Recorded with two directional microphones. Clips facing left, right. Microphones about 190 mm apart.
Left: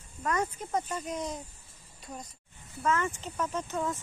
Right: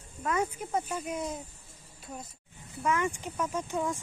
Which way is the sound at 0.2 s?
10° right (ahead or behind).